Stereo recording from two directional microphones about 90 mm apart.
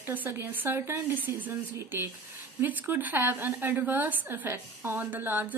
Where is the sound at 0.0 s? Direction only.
20° right (ahead or behind).